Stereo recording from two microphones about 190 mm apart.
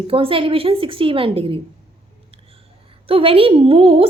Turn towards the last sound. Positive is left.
turn(degrees=-30)  # may be behind; listen again after turning